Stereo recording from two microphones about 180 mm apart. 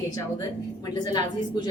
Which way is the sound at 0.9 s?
25° left (ahead or behind).